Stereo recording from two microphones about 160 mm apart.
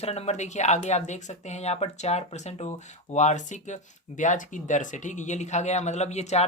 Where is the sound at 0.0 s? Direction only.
40° left (ahead or behind).